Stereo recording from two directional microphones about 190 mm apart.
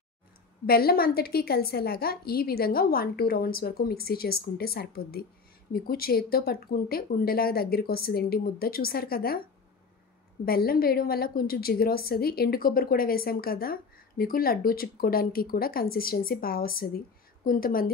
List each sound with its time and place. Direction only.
0.7 s a woman's voice: 55° left (ahead or behind)
10.4 s a woman's voice: 50° left (ahead or behind)